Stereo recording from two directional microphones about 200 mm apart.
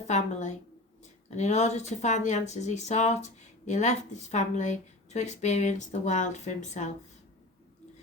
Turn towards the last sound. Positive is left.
turn(degrees=35)  # may be behind; listen again after turning